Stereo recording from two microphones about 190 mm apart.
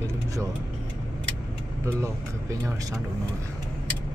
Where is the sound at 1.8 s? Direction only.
15° right (ahead or behind).